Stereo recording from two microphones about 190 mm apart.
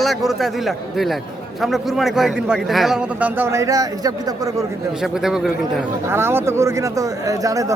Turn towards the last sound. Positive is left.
turn(degrees=-15)  # may be behind; listen again after turning